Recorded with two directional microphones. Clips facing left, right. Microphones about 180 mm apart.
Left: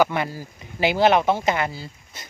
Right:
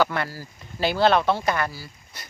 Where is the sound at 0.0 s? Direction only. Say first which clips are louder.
Left 3 dB; 15° left (ahead or behind).